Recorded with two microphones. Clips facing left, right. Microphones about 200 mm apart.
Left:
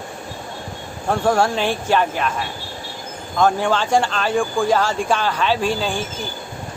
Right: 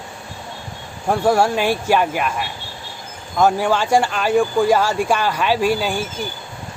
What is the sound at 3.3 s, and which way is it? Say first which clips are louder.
Speech: right 1 dB; 10° right (ahead or behind).